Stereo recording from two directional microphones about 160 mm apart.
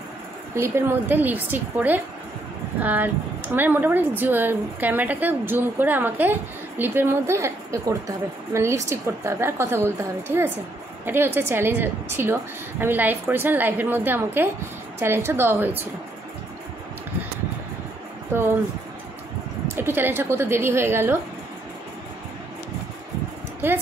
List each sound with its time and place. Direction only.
0.6 s speech: 15° right (ahead or behind)
18.3 s speech: 15° right (ahead or behind)
19.7 s speech: 15° right (ahead or behind)